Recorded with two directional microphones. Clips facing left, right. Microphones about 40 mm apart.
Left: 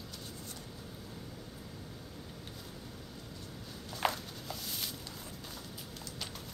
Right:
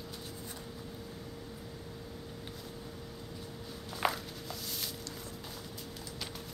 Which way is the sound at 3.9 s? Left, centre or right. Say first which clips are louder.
Right 1 dB; centre.